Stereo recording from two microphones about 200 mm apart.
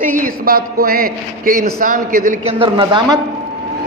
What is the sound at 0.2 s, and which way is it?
A man's voice, 45° right (ahead or behind).